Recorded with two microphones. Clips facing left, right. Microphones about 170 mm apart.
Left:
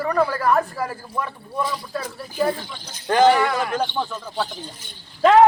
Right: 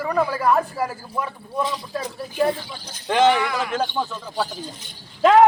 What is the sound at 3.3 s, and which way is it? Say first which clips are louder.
Speech: left 3 dB; 40° left (ahead or behind).